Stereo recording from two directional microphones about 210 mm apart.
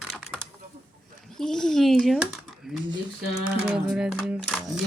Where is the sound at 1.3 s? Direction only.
Centre (ahead or behind).